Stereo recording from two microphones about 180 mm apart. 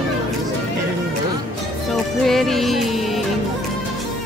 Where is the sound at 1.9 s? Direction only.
Centre (ahead or behind).